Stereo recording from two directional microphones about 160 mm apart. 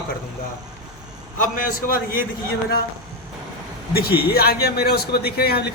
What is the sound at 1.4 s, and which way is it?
Speech, 60° left (ahead or behind).